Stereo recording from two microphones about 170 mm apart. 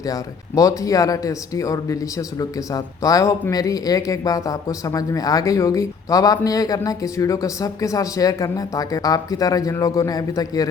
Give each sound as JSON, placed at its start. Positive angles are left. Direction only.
{"t": 0.0, "sound": "a man's voice", "side_deg": 20}